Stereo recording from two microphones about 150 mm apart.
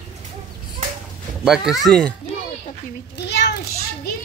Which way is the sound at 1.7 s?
Centre (ahead or behind).